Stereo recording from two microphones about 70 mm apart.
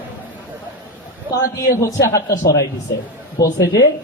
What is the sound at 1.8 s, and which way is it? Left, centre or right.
A man's voice, left.